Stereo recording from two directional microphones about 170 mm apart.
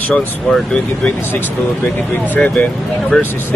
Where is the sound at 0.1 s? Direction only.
5° left (ahead or behind).